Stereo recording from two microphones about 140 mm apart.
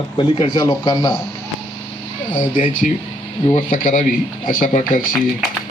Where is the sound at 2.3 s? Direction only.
70° left (ahead or behind).